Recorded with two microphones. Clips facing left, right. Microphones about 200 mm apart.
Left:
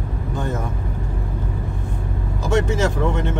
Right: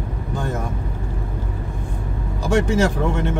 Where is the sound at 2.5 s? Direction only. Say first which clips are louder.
Right 2 dB; 20° left (ahead or behind).